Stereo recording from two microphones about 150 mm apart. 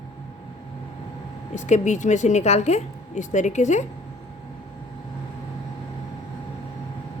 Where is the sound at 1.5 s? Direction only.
55° left (ahead or behind).